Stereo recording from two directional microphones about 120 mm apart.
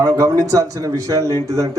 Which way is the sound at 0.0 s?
30° right (ahead or behind).